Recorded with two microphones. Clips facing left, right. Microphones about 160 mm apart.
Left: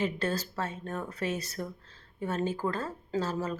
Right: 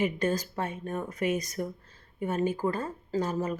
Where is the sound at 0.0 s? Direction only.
15° right (ahead or behind).